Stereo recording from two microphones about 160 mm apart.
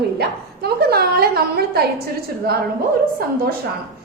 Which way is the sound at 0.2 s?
85° right.